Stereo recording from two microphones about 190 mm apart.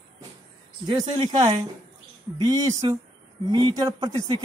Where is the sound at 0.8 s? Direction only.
20° right (ahead or behind).